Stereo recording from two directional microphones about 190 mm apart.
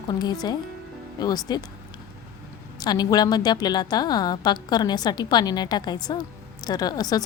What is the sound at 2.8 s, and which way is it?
Speech, 20° left (ahead or behind).